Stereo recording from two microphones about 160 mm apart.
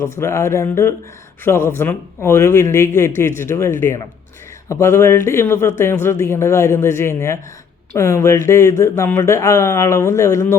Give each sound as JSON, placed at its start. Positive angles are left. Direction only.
{"t": 0.0, "sound": "speech", "side_deg": 15}